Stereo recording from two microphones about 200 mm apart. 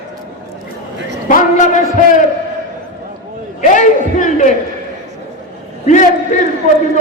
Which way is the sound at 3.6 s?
40° left (ahead or behind).